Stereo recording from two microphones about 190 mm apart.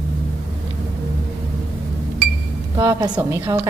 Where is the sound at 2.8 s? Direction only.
15° right (ahead or behind).